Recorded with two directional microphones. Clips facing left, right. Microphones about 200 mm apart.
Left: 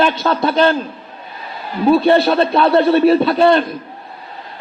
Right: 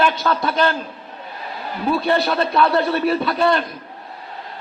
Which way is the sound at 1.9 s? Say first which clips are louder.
Left 7 dB; 30° left (ahead or behind).